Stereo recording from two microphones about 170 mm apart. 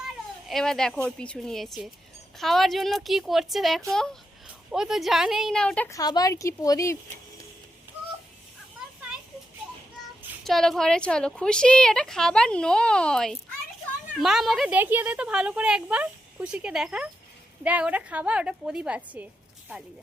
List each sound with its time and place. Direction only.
0.4 s a woman's voice: centre (ahead or behind)
5.9 s speech: 20° left (ahead or behind)
10.4 s a woman's voice: centre (ahead or behind)